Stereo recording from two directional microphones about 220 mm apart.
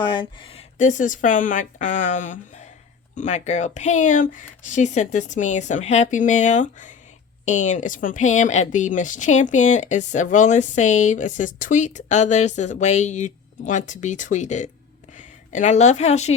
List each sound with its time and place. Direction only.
0.0 s a woman's voice: 20° left (ahead or behind)